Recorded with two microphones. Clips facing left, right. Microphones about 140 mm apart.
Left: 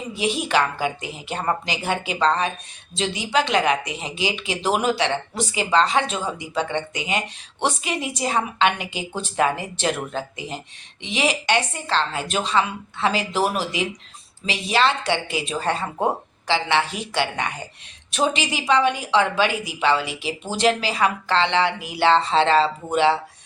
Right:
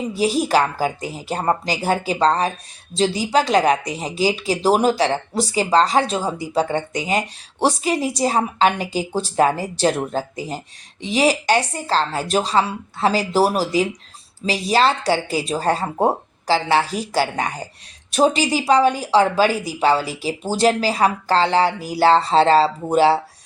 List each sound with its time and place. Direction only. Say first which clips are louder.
0.1 s speech: right 4 dB; 40° right (ahead or behind)